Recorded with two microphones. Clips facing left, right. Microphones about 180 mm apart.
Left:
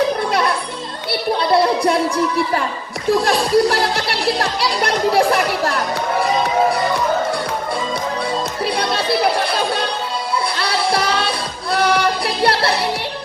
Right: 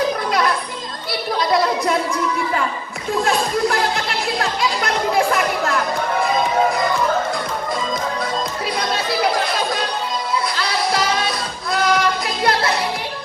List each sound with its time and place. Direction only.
1.4 s a sound: 30° left (ahead or behind)
3.1 s music: 35° left (ahead or behind)
8.9 s music: 30° left (ahead or behind)
11.3 s music: 30° left (ahead or behind)